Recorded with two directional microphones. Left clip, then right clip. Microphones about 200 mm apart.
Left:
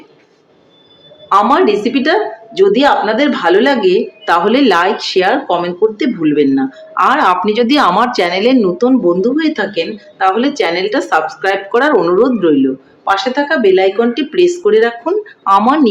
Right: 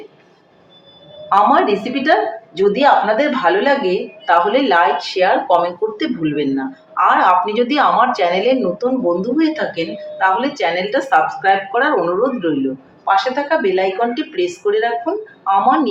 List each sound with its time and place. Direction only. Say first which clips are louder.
1.3 s a woman's voice: left 3 dB; 45° left (ahead or behind)